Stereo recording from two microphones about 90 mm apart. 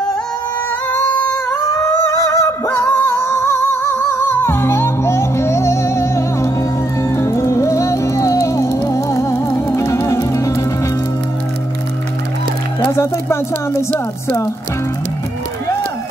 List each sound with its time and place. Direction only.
0.9 s singing: 20° left (ahead or behind)
1.5 s music: 30° left (ahead or behind)
12.9 s speech: 30° left (ahead or behind)